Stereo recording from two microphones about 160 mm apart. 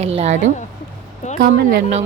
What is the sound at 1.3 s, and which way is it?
Speech, 75° right (ahead or behind).